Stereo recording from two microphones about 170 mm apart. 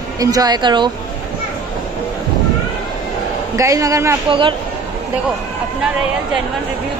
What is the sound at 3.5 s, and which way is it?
Speech, 20° right (ahead or behind).